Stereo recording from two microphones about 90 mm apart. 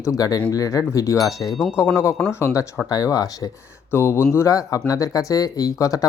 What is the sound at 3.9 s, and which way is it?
Speech, 30° left (ahead or behind).